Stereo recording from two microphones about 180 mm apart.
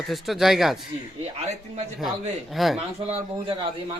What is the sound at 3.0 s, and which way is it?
Speech, 35° right (ahead or behind).